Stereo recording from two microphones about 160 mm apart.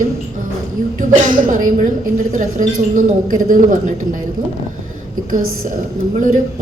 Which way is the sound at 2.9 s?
55° right (ahead or behind).